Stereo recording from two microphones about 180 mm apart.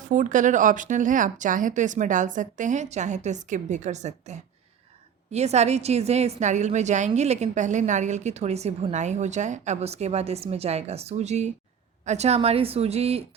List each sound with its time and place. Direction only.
0.1 s a woman's voice: 45° right (ahead or behind)